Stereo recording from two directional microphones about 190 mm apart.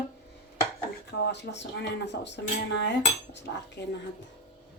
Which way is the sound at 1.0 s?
65° left (ahead or behind).